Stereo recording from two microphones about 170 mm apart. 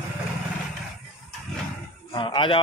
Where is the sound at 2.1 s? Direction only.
30° left (ahead or behind).